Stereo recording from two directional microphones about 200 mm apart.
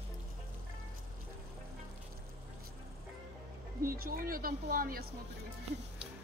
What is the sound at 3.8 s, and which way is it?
Speech, 45° right (ahead or behind).